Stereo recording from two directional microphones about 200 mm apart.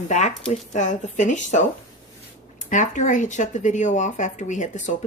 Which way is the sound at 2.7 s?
40° left (ahead or behind).